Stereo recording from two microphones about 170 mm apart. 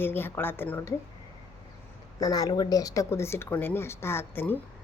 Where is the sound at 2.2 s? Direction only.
20° left (ahead or behind).